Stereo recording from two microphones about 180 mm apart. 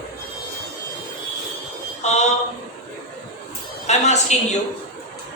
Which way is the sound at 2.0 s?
40° left (ahead or behind).